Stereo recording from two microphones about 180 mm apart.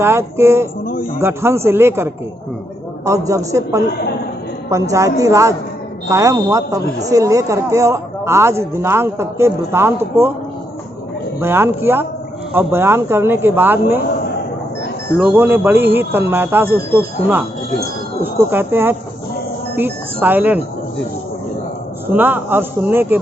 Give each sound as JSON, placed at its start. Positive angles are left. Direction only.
{"t": 0.0, "sound": "speech", "side_deg": -15}
{"t": 0.9, "sound": "a man's voice", "side_deg": 50}
{"t": 1.2, "sound": "speech", "side_deg": -15}
{"t": 3.1, "sound": "speech", "side_deg": -15}
{"t": 11.3, "sound": "speech", "side_deg": -10}
{"t": 15.4, "sound": "speech", "side_deg": -10}
{"t": 18.2, "sound": "speech", "side_deg": -10}
{"t": 22.1, "sound": "speech", "side_deg": -10}